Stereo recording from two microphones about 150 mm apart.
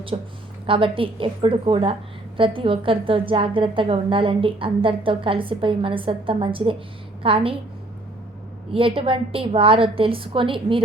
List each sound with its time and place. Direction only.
0.1 s a woman's voice: 40° right (ahead or behind)
9.0 s a woman's voice: 35° right (ahead or behind)